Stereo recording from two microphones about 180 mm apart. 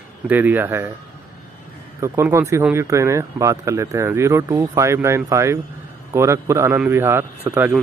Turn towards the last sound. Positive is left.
turn(degrees=-10)  # may be behind; listen again after turning